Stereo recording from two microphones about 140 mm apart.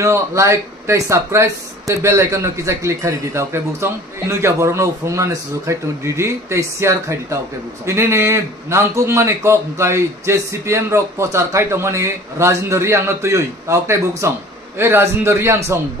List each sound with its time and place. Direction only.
0.0 s a man's voice: 20° right (ahead or behind)